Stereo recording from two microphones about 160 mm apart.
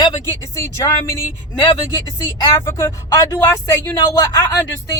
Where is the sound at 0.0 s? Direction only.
20° left (ahead or behind).